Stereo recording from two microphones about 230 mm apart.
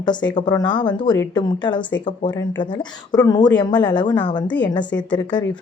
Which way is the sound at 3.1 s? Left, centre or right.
Centre.